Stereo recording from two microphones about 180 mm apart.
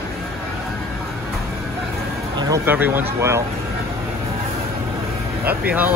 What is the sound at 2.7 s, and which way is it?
Speech, 10° right (ahead or behind).